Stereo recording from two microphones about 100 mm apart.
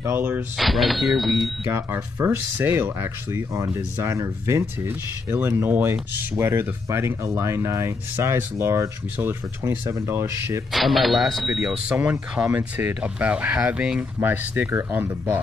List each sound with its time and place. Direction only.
0.6 s speech: centre (ahead or behind)
1.7 s speech: 25° right (ahead or behind)
10.7 s speech: centre (ahead or behind); by 15.0 s 20° right (ahead or behind)